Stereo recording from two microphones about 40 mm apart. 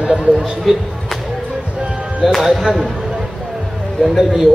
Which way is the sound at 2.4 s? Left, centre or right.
Centre.